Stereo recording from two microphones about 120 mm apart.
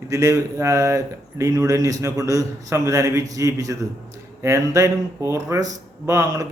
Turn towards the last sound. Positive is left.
turn(degrees=-30)  # may be behind; listen again after turning